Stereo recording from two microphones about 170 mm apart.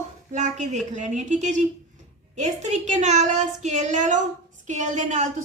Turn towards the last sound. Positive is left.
turn(degrees=-45)  # may be behind; listen again after turning